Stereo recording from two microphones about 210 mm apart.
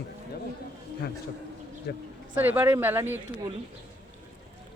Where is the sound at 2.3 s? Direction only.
10° right (ahead or behind).